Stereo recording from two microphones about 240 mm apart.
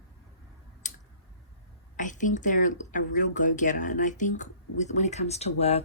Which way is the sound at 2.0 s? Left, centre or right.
Left.